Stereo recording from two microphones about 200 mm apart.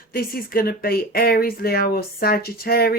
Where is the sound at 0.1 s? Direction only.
45° left (ahead or behind).